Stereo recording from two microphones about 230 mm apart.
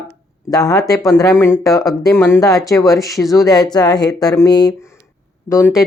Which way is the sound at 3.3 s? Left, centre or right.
Centre.